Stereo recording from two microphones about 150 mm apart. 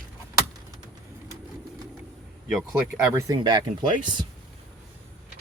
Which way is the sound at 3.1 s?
20° right (ahead or behind).